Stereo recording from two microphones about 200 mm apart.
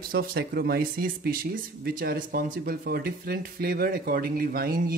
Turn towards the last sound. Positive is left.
turn(degrees=-50)  # may be behind; listen again after turning